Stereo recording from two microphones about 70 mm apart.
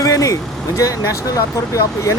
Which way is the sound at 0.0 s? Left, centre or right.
Left.